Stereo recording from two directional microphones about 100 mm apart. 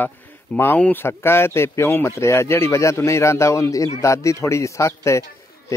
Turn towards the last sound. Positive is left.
turn(degrees=30)  # may be behind; listen again after turning